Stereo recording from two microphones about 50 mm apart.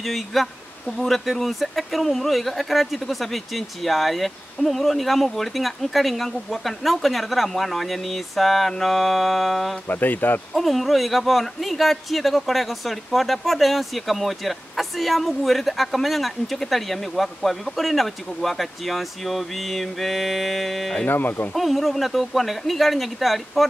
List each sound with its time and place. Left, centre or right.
0.0 s speech: centre
9.8 s speech: left
10.5 s speech: centre
21.1 s speech: left
21.5 s speech: centre